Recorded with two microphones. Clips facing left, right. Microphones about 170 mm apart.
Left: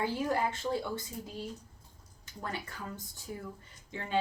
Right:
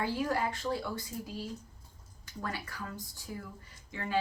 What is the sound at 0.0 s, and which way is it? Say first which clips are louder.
Speech: left 1 dB; 25° left (ahead or behind).